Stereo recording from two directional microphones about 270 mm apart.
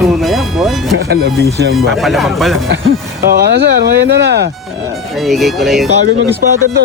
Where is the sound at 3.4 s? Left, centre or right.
Right.